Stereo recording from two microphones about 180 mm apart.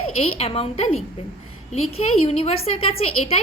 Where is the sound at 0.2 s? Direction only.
35° left (ahead or behind).